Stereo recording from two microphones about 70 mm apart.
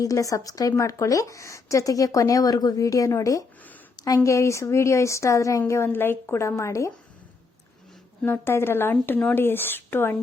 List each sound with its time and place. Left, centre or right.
0.0 s speech: left
5.9 s speech: left
8.2 s speech: left